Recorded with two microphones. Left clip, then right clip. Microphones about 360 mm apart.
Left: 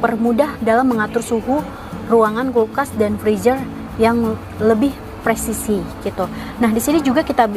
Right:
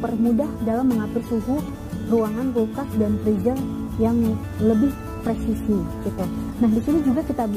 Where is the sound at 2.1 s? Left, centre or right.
Centre.